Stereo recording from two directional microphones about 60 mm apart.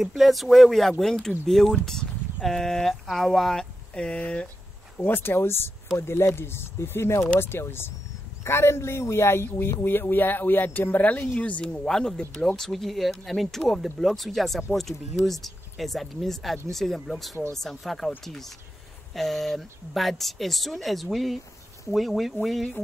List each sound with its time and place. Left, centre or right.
0.0 s speech: centre
4.9 s speech: left
11.6 s speech: centre
12.5 s speech: centre